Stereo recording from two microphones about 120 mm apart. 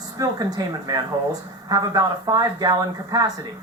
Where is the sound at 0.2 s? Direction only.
35° right (ahead or behind).